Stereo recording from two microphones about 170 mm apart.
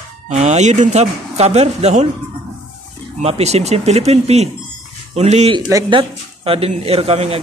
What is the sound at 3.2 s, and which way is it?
Speech, 40° right (ahead or behind).